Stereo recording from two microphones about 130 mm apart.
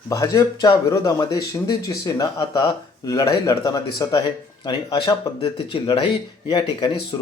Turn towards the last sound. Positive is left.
turn(degrees=35)  # may be behind; listen again after turning